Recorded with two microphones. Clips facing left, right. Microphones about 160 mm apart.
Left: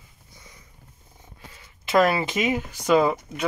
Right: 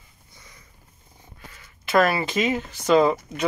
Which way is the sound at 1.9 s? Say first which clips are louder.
Even; 15° left (ahead or behind).